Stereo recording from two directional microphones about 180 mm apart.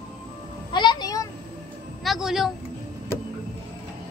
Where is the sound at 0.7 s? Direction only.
25° left (ahead or behind).